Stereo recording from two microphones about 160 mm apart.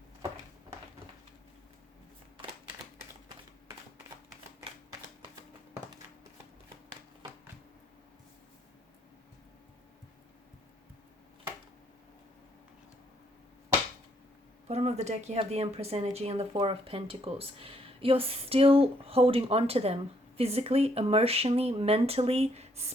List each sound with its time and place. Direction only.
14.7 s speech: 40° right (ahead or behind)